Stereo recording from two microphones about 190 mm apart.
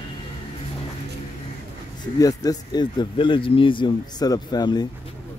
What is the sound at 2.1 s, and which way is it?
Speech, 20° left (ahead or behind).